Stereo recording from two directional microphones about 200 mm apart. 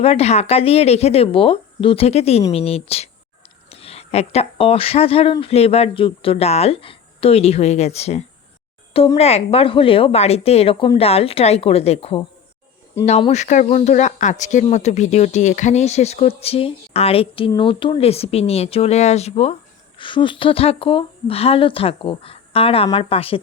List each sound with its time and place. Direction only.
0.0 s speech: 30° left (ahead or behind)